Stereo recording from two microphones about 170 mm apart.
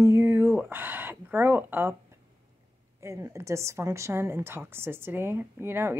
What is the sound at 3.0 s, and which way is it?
A woman's voice, 15° right (ahead or behind).